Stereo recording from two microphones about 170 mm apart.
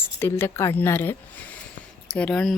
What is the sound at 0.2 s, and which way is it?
Speech, 15° left (ahead or behind).